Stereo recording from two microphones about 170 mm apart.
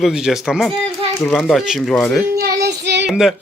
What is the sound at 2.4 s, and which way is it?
Child singing, 75° right (ahead or behind).